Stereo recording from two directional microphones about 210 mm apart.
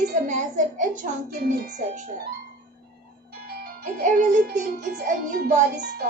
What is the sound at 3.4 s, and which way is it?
A child's voice, 45° right (ahead or behind).